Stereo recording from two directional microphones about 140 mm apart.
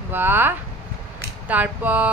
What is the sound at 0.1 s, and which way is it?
Speech, 15° right (ahead or behind).